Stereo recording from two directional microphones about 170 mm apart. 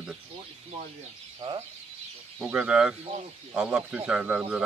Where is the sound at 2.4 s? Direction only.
5° right (ahead or behind).